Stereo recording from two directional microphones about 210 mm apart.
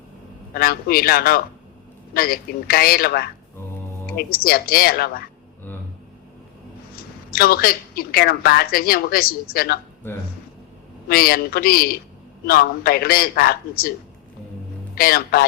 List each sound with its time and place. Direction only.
0.5 s a woman's voice: 45° left (ahead or behind)
6.9 s a woman's voice: 45° left (ahead or behind)
11.1 s a woman's voice: 45° left (ahead or behind)
14.9 s a woman's voice: 45° left (ahead or behind)